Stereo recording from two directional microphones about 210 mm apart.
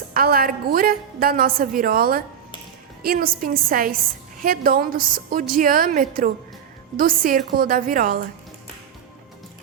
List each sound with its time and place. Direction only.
0.1 s a woman's voice: 45° right (ahead or behind)